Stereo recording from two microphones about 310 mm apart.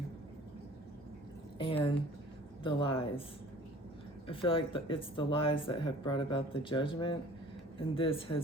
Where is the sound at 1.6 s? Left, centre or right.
Centre.